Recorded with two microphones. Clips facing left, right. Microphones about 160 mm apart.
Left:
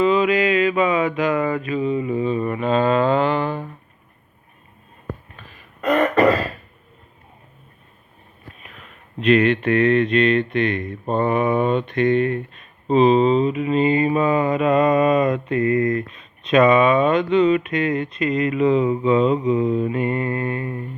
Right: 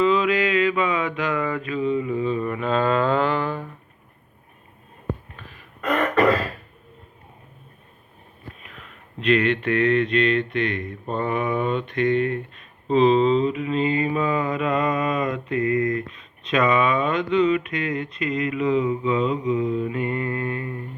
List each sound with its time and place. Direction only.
0.0 s mantra: 15° left (ahead or behind)
1.6 s mantra: 15° left (ahead or behind)
5.8 s throat clearing: 5° left (ahead or behind)
9.2 s a sound: 20° left (ahead or behind)
12.9 s mantra: 15° left (ahead or behind)
14.2 s a sound: 20° left (ahead or behind)
15.5 s mantra: 35° left (ahead or behind)
16.4 s a sound: 20° left (ahead or behind)
18.4 s mantra: 35° left (ahead or behind)